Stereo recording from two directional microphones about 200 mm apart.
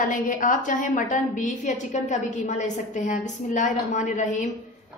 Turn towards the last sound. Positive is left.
turn(degrees=35)  # may be behind; listen again after turning